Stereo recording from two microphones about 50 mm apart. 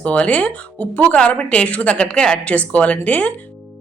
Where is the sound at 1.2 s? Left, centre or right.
Left.